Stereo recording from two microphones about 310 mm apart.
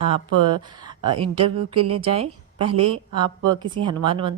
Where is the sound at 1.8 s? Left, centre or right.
Centre.